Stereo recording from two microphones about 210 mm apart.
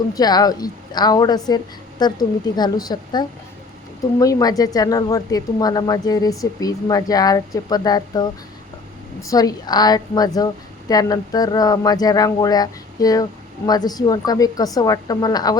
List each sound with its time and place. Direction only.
0.1 s a woman's voice: 20° left (ahead or behind)